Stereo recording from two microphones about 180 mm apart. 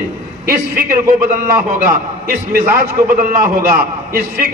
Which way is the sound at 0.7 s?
55° right (ahead or behind).